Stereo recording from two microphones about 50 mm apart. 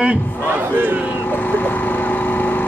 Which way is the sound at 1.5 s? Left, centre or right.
Left.